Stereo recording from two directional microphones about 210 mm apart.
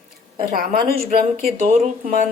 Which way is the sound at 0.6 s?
45° right (ahead or behind).